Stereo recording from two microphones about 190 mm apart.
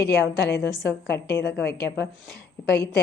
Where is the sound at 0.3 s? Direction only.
65° left (ahead or behind).